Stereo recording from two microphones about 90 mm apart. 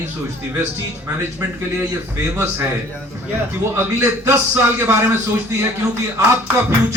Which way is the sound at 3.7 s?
30° right (ahead or behind).